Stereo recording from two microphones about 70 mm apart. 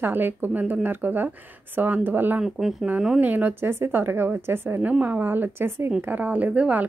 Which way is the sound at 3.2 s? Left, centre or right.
Right.